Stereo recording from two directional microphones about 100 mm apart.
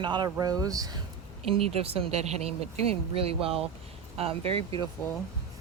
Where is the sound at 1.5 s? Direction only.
75° right (ahead or behind).